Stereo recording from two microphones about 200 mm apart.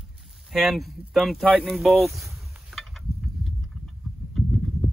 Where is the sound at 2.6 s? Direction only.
Centre (ahead or behind).